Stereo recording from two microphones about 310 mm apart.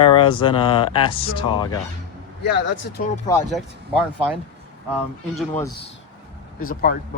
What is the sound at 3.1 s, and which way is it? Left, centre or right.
Speech, centre.